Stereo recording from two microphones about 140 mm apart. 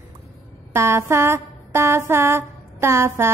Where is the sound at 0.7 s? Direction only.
20° right (ahead or behind).